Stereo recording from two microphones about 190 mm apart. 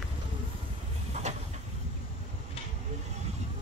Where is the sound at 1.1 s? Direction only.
35° right (ahead or behind).